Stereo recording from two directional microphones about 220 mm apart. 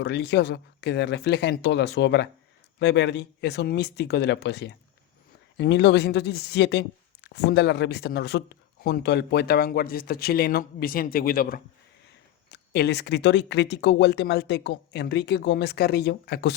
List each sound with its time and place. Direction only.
0.0 s speech: 50° left (ahead or behind)